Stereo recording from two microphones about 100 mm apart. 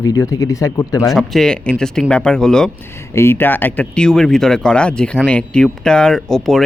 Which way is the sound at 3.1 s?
25° left (ahead or behind).